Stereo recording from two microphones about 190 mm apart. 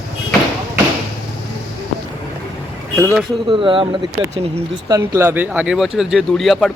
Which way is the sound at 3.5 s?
25° right (ahead or behind).